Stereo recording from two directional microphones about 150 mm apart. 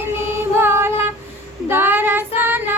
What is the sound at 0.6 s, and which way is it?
Female singing, 15° right (ahead or behind).